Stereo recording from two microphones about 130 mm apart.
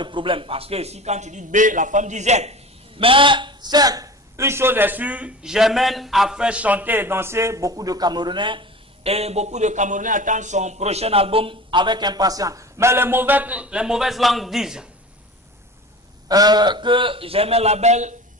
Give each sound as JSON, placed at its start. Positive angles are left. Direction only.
{"t": 0.0, "sound": "a man's voice", "side_deg": -40}
{"t": 3.0, "sound": "a man's voice", "side_deg": -40}
{"t": 9.0, "sound": "a man's voice", "side_deg": -55}
{"t": 16.3, "sound": "a man's voice", "side_deg": -30}